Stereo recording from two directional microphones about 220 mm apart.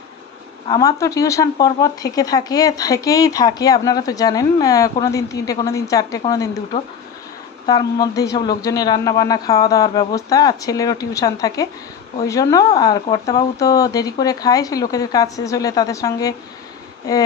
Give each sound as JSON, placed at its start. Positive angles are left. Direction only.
{"t": 0.7, "sound": "speech", "side_deg": 15}
{"t": 7.6, "sound": "speech", "side_deg": 20}